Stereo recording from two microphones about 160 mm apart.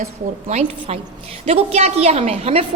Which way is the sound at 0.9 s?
40° right (ahead or behind).